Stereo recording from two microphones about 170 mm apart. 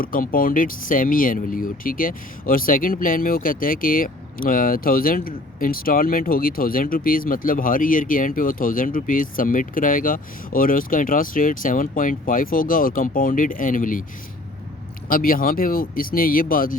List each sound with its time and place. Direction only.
0.0 s speech: 55° left (ahead or behind)
15.1 s speech: 55° left (ahead or behind)